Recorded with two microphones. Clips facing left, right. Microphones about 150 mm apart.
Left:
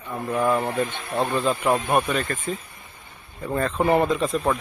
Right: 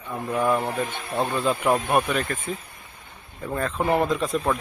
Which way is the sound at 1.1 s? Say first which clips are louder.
Left 1 dB; 15° left (ahead or behind).